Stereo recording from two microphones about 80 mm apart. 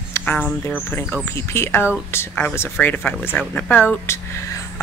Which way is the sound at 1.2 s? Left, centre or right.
Left.